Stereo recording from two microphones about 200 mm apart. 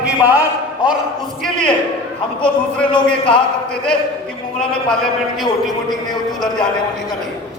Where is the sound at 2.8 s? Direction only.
5° left (ahead or behind).